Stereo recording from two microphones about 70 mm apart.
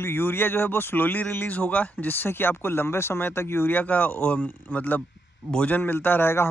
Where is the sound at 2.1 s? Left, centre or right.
Left.